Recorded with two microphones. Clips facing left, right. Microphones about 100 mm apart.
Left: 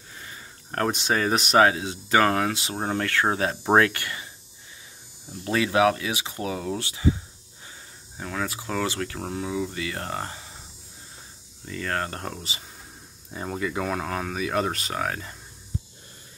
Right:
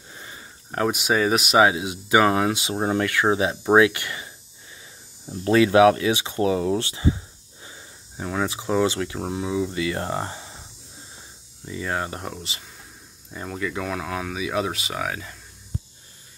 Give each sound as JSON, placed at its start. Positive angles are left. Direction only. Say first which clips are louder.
{"t": 0.1, "sound": "a sound", "louder": "right 1 dB", "side_deg": -20}
{"t": 0.7, "sound": "speech", "louder": "right 2 dB", "side_deg": -10}
{"t": 5.3, "sound": "speech", "louder": "right 7 dB", "side_deg": -40}
{"t": 5.6, "sound": "speech", "louder": "right 6 dB", "side_deg": -25}
{"t": 8.2, "sound": "speech", "louder": "right 4 dB", "side_deg": -15}
{"t": 11.6, "sound": "speech", "louder": "right 1 dB", "side_deg": -10}
{"t": 12.4, "sound": "speech", "louder": "even", "side_deg": 0}
{"t": 13.4, "sound": "speech", "louder": "even", "side_deg": 10}